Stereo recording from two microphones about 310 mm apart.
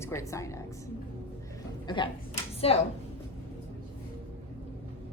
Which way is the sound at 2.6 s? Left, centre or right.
Centre.